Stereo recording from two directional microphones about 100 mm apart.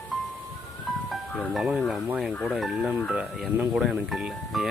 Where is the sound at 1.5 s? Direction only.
Centre (ahead or behind).